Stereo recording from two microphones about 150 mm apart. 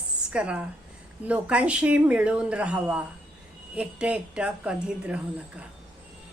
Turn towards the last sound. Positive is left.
turn(degrees=-5)  # may be behind; listen again after turning